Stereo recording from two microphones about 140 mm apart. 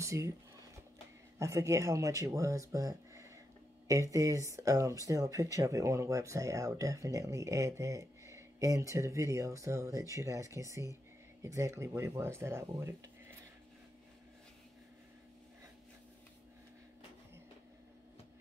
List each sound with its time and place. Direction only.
0.0 s speech: 20° right (ahead or behind)
1.4 s speech: 25° right (ahead or behind)